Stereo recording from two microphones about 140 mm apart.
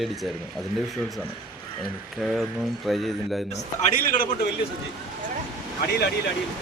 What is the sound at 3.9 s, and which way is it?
Speech, 75° left (ahead or behind).